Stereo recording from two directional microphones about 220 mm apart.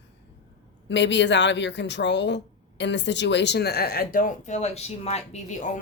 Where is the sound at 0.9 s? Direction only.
50° left (ahead or behind).